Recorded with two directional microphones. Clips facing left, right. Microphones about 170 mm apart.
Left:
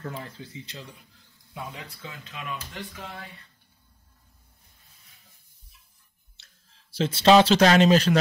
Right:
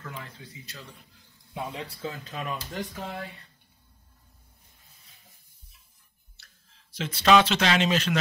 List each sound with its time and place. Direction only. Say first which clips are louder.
0.0 s speech: left 5 dB; 35° left (ahead or behind); by 0.9 s 20° left (ahead or behind)
1.5 s speech: right 4 dB; 25° right (ahead or behind); by 3.1 s 45° right (ahead or behind)
6.4 s clicking: right 3 dB; 20° left (ahead or behind)
7.0 s speech: left 3 dB; 30° left (ahead or behind)